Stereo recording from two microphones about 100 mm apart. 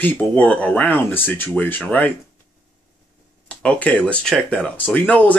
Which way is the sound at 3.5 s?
10° left (ahead or behind).